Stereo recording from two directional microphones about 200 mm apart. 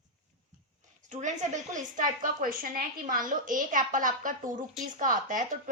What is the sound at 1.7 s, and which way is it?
A woman's voice, 40° right (ahead or behind).